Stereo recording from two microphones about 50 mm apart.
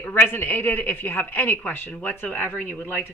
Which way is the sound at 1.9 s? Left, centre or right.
Left.